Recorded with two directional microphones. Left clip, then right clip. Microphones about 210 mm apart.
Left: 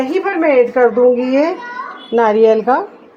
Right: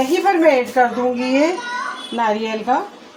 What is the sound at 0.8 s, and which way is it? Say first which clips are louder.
Speech: left 4 dB; 45° left (ahead or behind).